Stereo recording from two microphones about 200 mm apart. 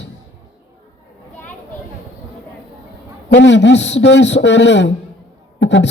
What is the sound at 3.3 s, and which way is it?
A man's voice, 60° left (ahead or behind).